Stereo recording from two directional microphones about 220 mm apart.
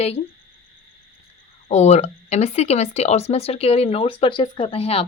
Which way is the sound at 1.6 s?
30° left (ahead or behind).